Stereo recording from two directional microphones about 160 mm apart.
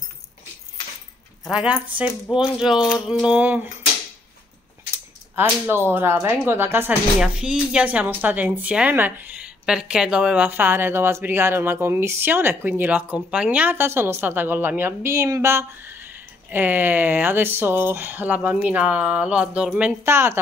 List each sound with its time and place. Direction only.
1.5 s speech: 5° right (ahead or behind)
4.9 s a sound: 15° right (ahead or behind)
5.9 s speech: 15° right (ahead or behind)